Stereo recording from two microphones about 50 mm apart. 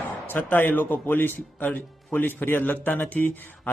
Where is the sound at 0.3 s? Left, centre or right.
Left.